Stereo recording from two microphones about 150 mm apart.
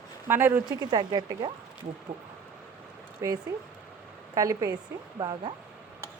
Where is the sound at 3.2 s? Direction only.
20° right (ahead or behind).